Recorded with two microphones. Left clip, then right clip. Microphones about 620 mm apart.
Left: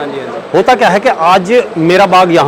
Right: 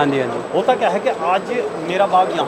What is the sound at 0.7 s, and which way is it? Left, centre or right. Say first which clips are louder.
Speech: left 9 dB; left.